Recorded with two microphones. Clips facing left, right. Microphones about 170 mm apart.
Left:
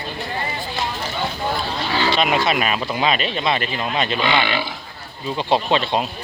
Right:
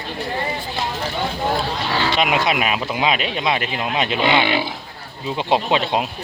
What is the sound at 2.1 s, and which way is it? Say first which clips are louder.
Speech: left 1 dB; 15° right (ahead or behind).